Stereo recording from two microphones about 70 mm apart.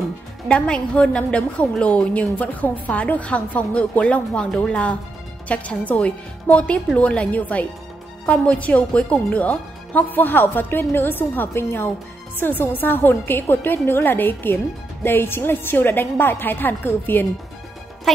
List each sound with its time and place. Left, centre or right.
0.5 s a woman's voice: centre
4.3 s a woman's voice: centre; by 17.3 s left
18.1 s speech: centre